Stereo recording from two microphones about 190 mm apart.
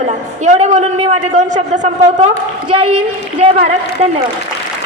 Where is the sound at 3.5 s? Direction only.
35° right (ahead or behind).